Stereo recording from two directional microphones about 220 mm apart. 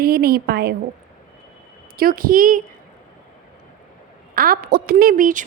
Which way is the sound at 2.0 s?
40° right (ahead or behind).